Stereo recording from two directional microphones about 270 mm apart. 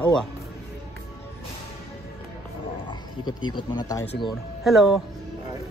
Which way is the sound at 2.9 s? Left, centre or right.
Centre.